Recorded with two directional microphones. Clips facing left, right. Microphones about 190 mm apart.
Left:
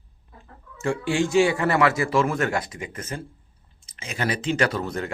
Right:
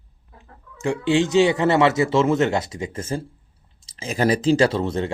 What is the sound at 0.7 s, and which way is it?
Speech, 15° right (ahead or behind).